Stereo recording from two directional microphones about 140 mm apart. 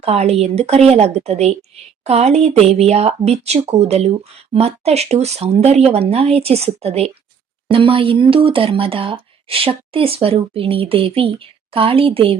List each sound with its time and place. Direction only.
0.0 s speech: 50° right (ahead or behind)